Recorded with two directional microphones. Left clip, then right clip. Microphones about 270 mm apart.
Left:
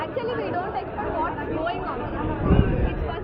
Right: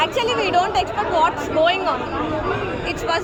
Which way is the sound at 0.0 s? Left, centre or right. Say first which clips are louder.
Right 8 dB; right.